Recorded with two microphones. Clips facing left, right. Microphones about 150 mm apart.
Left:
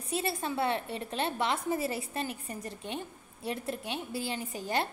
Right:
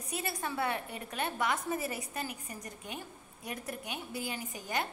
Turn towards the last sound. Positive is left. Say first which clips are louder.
# left 4 dB
turn(degrees=30)  # may be behind; listen again after turning